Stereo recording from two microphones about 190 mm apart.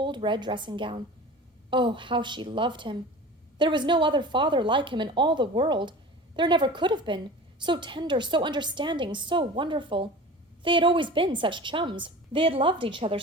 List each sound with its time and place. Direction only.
0.0 s a woman's voice: 25° right (ahead or behind)